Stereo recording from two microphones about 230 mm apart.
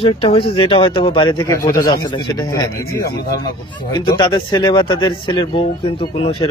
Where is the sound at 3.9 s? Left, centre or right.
Centre.